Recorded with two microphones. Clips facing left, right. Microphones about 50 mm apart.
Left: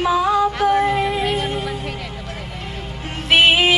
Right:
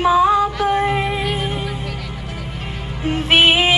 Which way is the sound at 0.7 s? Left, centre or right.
Right.